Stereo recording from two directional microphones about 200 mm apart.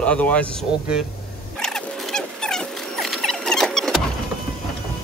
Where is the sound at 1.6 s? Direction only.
5° left (ahead or behind).